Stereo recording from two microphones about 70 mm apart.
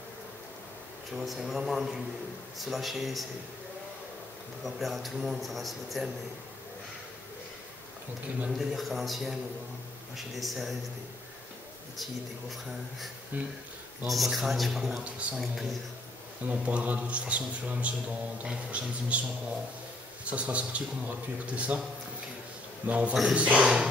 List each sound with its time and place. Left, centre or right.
1.1 s a man's voice: centre
4.6 s a man's voice: centre
8.5 s a man's voice: centre
13.3 s a man's voice: right
14.0 s a man's voice: centre
16.4 s a man's voice: right
20.2 s a man's voice: centre
22.8 s a man's voice: centre